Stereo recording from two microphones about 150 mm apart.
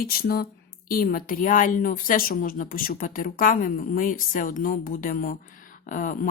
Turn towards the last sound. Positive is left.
turn(degrees=60)  # may be behind; listen again after turning